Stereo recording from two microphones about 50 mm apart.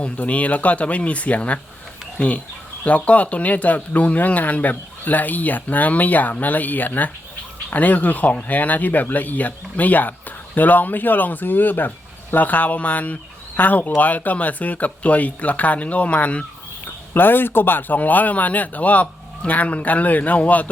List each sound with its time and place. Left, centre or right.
0.0 s speech: left
16.8 s speech: left